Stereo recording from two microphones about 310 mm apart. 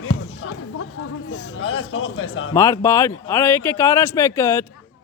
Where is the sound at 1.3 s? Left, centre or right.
Left.